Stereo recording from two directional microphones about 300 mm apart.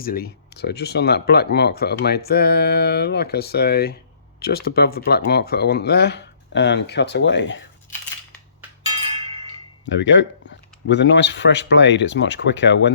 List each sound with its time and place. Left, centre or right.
0.0 s speech: left
9.1 s wind chime: centre
9.8 s speech: left